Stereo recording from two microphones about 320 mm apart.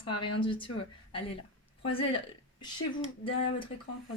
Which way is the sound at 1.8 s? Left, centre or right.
Centre.